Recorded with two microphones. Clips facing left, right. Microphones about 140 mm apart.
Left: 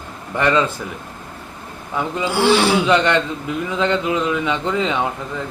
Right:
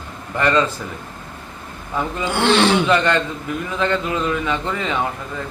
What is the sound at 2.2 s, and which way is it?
Speech, 10° left (ahead or behind).